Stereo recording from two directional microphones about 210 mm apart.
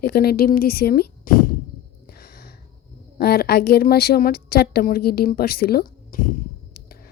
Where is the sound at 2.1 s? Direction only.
45° left (ahead or behind).